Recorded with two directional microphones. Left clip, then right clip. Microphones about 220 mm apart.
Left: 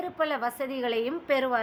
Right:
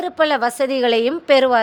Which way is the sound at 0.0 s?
35° right (ahead or behind).